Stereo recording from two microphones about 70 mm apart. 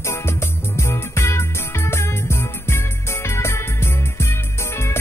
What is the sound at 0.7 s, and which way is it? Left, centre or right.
Music, left.